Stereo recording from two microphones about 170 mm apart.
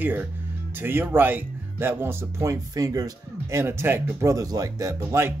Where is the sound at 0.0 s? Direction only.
10° right (ahead or behind).